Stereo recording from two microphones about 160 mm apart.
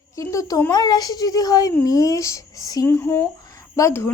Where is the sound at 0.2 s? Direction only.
20° left (ahead or behind).